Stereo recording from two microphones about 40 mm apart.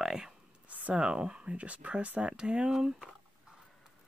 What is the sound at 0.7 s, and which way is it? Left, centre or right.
Speech, right.